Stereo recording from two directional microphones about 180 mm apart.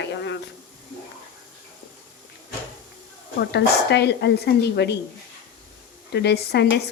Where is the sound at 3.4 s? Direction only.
70° left (ahead or behind).